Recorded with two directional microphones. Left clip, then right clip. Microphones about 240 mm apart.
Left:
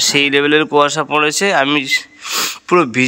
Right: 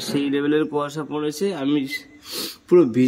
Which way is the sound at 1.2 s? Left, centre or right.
Centre.